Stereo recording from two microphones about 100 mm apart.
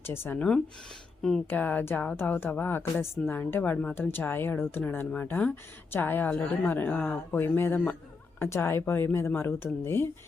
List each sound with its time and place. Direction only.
0.0 s speech: 20° left (ahead or behind)